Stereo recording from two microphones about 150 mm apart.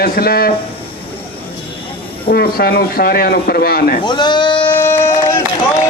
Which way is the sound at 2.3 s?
85° left.